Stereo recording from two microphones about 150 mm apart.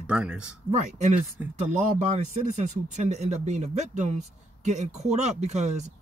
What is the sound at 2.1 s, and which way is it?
Speech, 50° right (ahead or behind).